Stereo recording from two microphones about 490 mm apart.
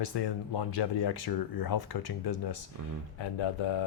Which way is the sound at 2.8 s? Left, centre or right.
Right.